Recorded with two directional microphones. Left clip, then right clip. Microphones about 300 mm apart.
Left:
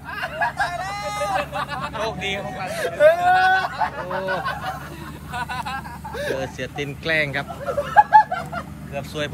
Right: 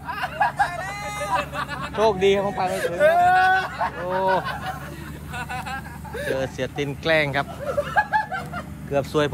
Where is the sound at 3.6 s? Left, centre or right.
Centre.